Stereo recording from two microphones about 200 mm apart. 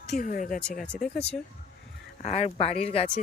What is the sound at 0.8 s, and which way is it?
Speech, 5° left (ahead or behind).